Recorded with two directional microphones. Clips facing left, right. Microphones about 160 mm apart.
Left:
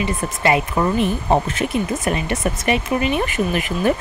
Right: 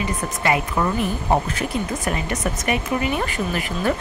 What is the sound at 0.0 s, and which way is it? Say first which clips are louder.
Speech: left 3 dB; 25° left (ahead or behind).